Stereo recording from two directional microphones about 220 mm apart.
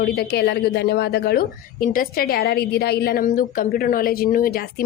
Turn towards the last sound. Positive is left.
turn(degrees=40)  # may be behind; listen again after turning